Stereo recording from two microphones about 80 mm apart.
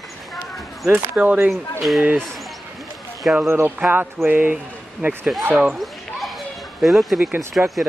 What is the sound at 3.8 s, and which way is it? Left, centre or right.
Speech, right.